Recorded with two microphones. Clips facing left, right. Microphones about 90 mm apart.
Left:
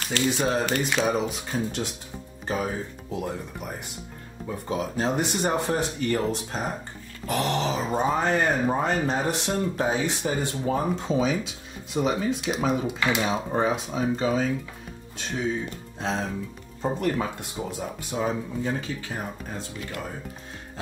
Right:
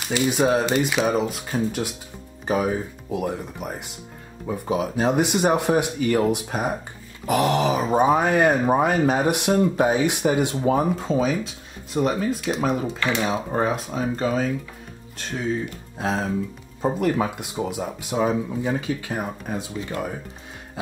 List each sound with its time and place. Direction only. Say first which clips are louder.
0.0 s speech: right 4 dB; 15° right (ahead or behind)
0.8 s speech: right 3 dB; 5° right (ahead or behind)
11.0 s speech: right 2 dB; centre (ahead or behind)